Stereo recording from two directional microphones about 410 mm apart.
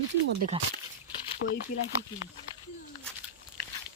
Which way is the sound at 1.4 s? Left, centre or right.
Left.